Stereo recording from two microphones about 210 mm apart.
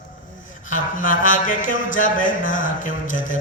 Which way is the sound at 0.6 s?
40° left (ahead or behind).